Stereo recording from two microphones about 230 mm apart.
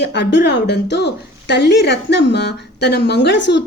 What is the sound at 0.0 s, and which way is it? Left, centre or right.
A woman's voice, left.